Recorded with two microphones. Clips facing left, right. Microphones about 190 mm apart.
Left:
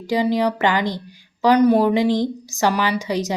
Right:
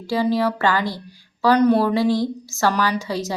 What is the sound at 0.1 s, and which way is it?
A woman's voice, 15° left (ahead or behind).